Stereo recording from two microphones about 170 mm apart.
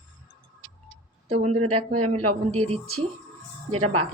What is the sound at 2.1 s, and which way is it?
Speech, 35° right (ahead or behind).